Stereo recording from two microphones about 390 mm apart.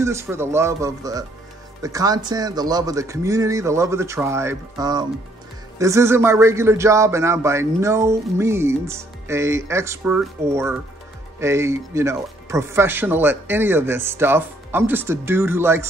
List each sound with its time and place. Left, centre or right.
0.0 s a man's voice: centre